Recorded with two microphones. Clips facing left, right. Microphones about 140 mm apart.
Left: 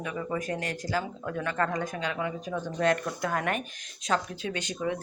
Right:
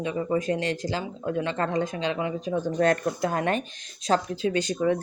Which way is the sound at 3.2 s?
25° right (ahead or behind).